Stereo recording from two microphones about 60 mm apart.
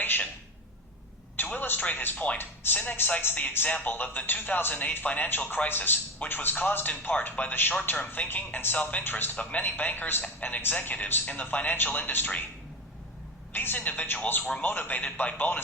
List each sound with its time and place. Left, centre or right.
0.0 s a sound: left
1.5 s a sound: left
2.1 s a man's voice: left
9.3 s speech: left
9.6 s a man's voice: left
13.5 s a woman's voice: left
13.7 s speech: left